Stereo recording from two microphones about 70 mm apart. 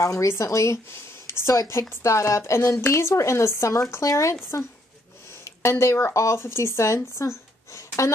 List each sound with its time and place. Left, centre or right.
0.0 s a woman's voice: left
1.2 s a sound: left
1.7 s a woman's voice: left
5.4 s speech: left